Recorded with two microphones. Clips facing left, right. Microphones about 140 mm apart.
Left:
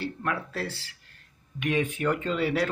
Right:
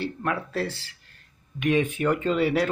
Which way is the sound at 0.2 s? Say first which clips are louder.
Right 5 dB; 25° right (ahead or behind).